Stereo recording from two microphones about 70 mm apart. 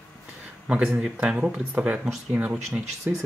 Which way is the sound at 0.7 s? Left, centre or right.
Centre.